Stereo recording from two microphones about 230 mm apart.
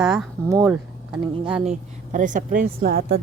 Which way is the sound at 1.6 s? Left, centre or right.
Right.